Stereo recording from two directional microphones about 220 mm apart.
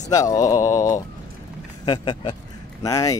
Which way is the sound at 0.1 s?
15° left (ahead or behind).